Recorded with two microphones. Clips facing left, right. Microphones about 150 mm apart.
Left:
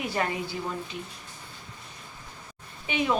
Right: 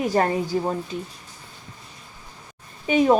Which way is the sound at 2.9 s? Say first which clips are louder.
Right 10 dB; 40° right (ahead or behind).